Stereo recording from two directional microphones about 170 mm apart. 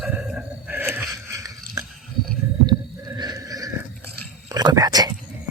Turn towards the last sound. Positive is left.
turn(degrees=-20)  # may be behind; listen again after turning